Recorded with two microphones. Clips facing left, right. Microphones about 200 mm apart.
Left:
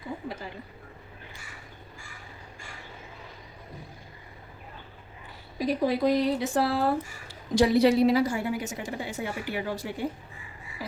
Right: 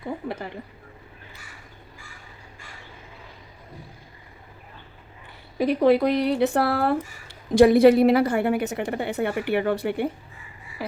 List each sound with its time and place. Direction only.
5.5 s speech: 60° right (ahead or behind)